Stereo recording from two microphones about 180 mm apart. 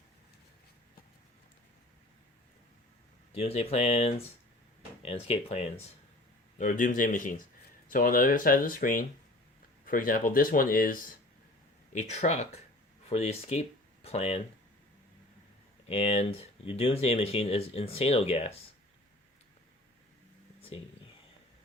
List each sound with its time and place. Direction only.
3.3 s speech: 35° left (ahead or behind)
6.6 s speech: 45° left (ahead or behind)
11.9 s speech: 40° left (ahead or behind)
15.9 s speech: 35° left (ahead or behind)
20.6 s a sound: 35° left (ahead or behind)